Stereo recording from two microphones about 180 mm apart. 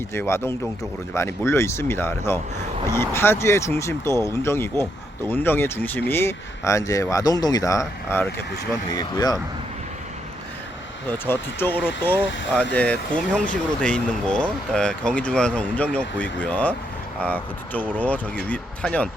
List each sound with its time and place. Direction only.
0.1 s speech: 15° left (ahead or behind)
11.3 s speech: 10° left (ahead or behind)